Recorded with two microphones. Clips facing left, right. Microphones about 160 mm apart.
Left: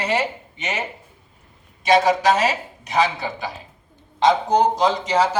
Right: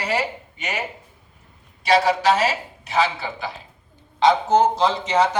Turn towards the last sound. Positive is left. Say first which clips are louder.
# even
turn(degrees=10)  # may be behind; listen again after turning